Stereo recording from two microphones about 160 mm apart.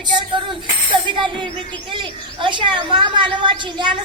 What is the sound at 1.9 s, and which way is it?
A woman's voice, 30° right (ahead or behind).